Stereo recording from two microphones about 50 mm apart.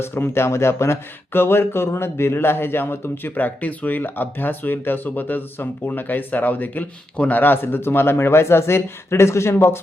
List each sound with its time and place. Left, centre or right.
0.0 s speech: left